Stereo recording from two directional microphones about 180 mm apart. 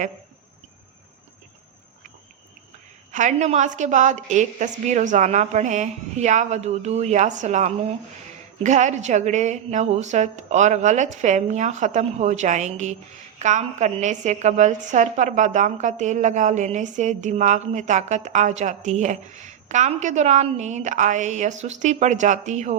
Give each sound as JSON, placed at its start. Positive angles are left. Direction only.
{"t": 3.1, "sound": "a woman's voice", "side_deg": -40}